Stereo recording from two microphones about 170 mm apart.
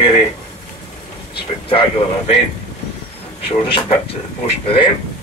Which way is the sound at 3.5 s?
35° left (ahead or behind).